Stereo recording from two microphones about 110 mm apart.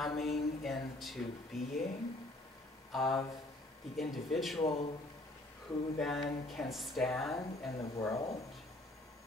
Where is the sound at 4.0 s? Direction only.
Centre (ahead or behind).